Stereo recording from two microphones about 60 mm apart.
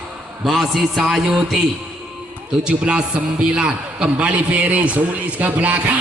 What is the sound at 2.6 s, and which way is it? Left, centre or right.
A man's voice, centre.